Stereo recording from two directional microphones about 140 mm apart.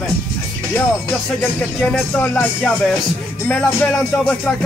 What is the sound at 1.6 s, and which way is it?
Music, 5° left (ahead or behind).